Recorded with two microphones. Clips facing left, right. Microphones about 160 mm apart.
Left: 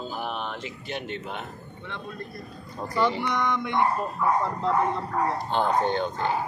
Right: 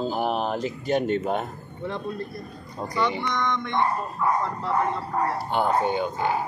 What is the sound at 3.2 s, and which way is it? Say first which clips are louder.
Speech: even; 10° left (ahead or behind).